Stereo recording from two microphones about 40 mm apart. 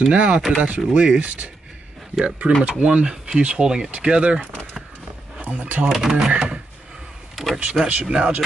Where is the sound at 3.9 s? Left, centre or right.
Right.